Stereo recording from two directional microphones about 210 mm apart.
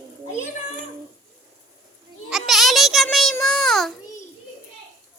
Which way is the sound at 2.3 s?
Centre (ahead or behind).